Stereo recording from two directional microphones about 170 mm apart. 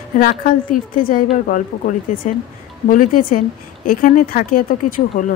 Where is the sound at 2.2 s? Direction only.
45° left (ahead or behind).